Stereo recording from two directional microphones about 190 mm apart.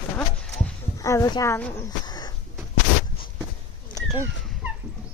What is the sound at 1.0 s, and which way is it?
Speech, 15° left (ahead or behind).